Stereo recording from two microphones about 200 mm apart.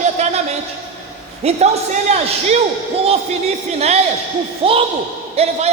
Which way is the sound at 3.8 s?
30° right (ahead or behind).